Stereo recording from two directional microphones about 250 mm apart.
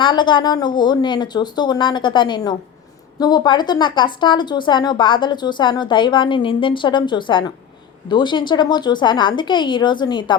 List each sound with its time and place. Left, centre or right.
0.0 s speech: centre